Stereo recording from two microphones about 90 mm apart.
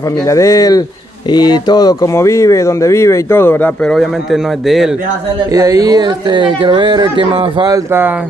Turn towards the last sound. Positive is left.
turn(degrees=-65)  # may be behind; listen again after turning